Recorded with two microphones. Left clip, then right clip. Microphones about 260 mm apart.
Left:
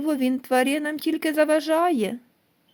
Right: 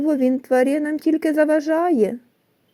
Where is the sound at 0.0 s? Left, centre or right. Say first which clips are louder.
Right 5 dB; left.